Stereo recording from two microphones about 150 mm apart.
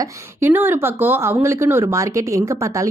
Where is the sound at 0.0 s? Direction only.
15° right (ahead or behind).